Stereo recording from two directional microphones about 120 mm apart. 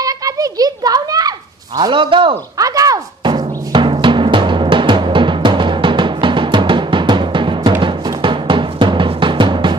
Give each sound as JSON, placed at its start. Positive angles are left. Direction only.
{"t": 0.0, "sound": "children playing", "side_deg": -30}
{"t": 1.8, "sound": "a man's voice", "side_deg": -40}
{"t": 2.6, "sound": "music", "side_deg": -30}
{"t": 7.8, "sound": "drum", "side_deg": -45}